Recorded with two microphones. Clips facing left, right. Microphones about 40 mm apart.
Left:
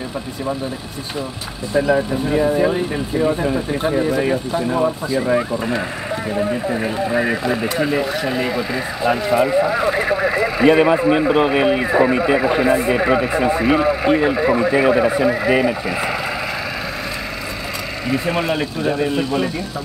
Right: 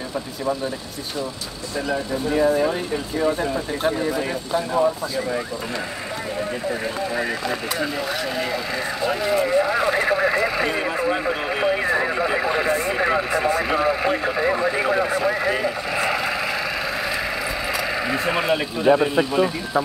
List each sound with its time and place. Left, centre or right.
2.3 s speech: centre
7.0 s speech: centre
10.7 s speech: left
11.8 s speech: centre
18.1 s speech: centre